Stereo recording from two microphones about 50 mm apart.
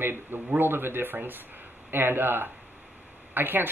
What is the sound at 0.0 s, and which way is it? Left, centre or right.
Speech, right.